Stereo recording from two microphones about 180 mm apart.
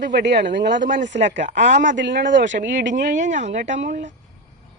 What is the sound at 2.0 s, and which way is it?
Speech, 80° right.